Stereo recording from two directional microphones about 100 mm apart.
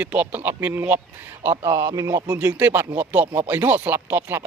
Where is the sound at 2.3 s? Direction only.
15° right (ahead or behind).